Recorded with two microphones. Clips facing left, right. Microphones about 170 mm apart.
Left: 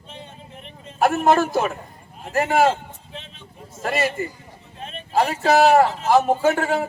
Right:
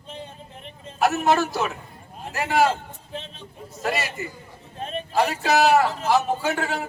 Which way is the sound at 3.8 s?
50° left (ahead or behind).